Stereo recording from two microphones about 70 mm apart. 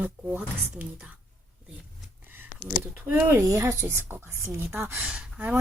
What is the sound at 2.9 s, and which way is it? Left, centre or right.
A woman's voice, right.